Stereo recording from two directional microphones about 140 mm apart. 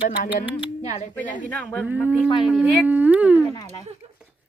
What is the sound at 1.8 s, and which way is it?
Speech, 10° right (ahead or behind).